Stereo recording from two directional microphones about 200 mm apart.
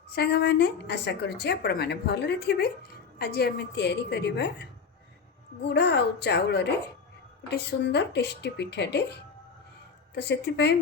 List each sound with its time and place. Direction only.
0.1 s a woman's voice: 55° left (ahead or behind)